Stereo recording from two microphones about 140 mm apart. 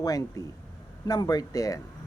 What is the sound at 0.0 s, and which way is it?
Speech, 25° left (ahead or behind).